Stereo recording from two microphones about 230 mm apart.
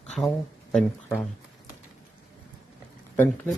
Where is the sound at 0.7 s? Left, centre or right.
Centre.